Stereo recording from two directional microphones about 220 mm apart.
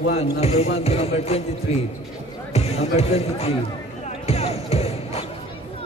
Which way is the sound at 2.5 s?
30° left (ahead or behind).